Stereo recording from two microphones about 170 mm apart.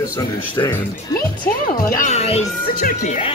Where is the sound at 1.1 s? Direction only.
55° left (ahead or behind); by 2.4 s 40° left (ahead or behind).